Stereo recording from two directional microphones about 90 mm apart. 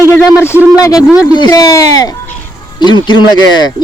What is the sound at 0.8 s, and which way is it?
Speech, 40° left (ahead or behind).